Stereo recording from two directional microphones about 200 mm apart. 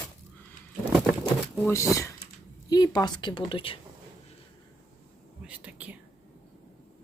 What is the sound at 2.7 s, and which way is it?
Speech, 20° left (ahead or behind).